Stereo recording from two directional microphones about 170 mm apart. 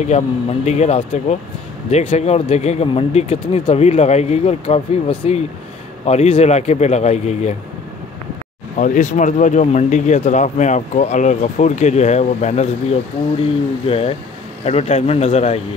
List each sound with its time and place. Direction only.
0.0 s speech: 40° left (ahead or behind)
8.7 s speech: 50° left (ahead or behind)
13.8 s speech: 35° left (ahead or behind)